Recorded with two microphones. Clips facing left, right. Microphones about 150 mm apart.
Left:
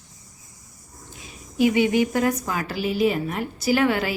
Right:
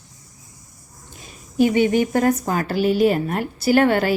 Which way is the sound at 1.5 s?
45° right (ahead or behind).